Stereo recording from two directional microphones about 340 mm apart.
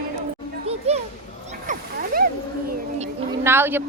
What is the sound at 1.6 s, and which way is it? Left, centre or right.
Splash, right.